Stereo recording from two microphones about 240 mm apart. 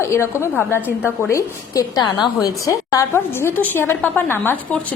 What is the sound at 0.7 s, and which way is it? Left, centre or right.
A woman's voice, centre.